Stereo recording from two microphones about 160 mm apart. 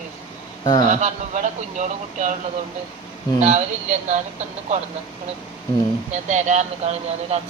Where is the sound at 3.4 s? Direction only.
50° right (ahead or behind).